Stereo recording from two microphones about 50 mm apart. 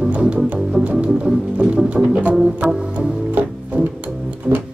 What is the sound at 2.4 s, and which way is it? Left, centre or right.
Music, centre.